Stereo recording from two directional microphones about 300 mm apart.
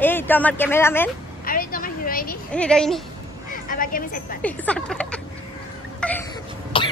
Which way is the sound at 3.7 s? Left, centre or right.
Left.